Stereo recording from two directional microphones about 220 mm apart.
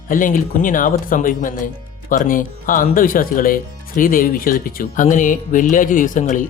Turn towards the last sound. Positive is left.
turn(degrees=35)  # may be behind; listen again after turning